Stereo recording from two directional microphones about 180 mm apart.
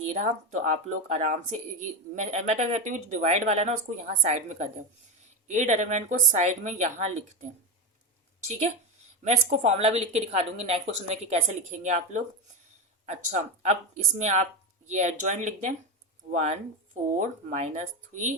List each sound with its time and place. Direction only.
0.0 s speech: 40° right (ahead or behind)
9.2 s speech: 40° right (ahead or behind)